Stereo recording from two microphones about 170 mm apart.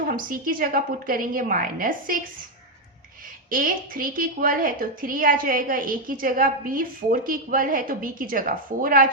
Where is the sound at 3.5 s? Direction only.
55° right (ahead or behind).